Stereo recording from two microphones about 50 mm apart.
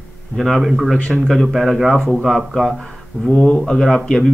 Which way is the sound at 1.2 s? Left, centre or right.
Centre.